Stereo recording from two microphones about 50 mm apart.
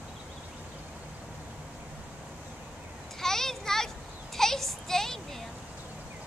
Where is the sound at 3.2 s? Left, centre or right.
Centre.